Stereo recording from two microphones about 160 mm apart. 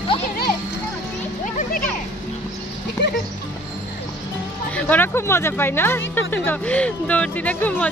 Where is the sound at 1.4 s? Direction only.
55° left (ahead or behind).